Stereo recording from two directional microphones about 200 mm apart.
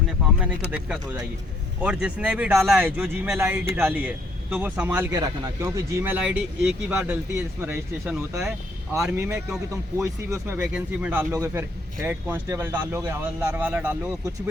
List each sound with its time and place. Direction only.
1.8 s speech: 5° right (ahead or behind)